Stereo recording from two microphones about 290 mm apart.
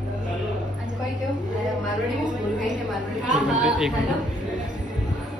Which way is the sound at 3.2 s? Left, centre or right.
Right.